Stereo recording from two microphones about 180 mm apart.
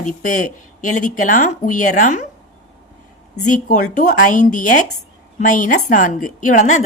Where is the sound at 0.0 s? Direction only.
45° left (ahead or behind).